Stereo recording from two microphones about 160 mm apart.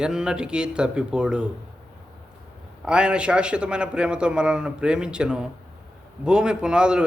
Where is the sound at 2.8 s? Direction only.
5° right (ahead or behind).